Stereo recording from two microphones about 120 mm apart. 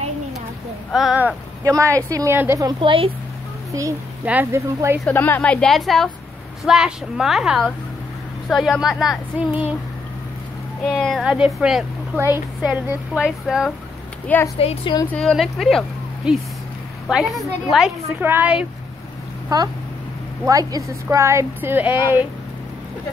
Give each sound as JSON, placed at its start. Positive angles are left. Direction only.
{"t": 0.9, "sound": "a woman's voice", "side_deg": -5}
{"t": 1.6, "sound": "a woman's voice", "side_deg": -25}
{"t": 2.6, "sound": "a woman's voice", "side_deg": -45}
{"t": 4.2, "sound": "speech", "side_deg": -10}
{"t": 4.5, "sound": "speech", "side_deg": -25}
{"t": 5.0, "sound": "a woman's voice", "side_deg": 15}
{"t": 10.9, "sound": "a woman's voice", "side_deg": 0}
{"t": 14.2, "sound": "a woman's voice", "side_deg": 15}
{"t": 14.6, "sound": "a woman's voice", "side_deg": 55}
{"t": 15.1, "sound": "a woman's voice", "side_deg": 5}
{"t": 18.2, "sound": "a woman's voice", "side_deg": -15}
{"t": 19.5, "sound": "speech", "side_deg": -30}